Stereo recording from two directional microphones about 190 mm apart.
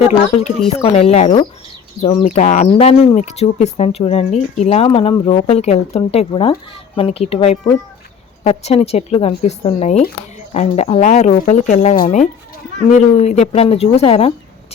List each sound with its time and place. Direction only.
0.8 s speech: 30° left (ahead or behind)